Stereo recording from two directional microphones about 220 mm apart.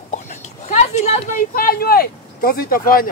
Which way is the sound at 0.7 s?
30° left (ahead or behind).